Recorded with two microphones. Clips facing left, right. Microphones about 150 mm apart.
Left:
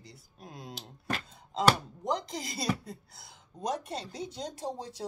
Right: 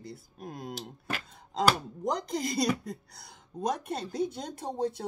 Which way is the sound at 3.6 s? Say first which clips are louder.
Right 3 dB; 55° right (ahead or behind).